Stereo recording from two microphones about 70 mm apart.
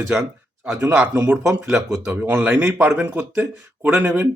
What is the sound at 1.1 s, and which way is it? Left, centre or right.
Speech, right.